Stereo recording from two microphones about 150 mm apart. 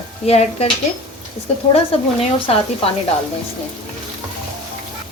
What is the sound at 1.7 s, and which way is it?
Speech, 40° left (ahead or behind).